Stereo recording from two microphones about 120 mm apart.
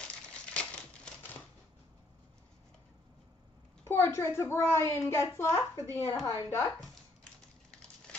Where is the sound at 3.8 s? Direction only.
20° left (ahead or behind).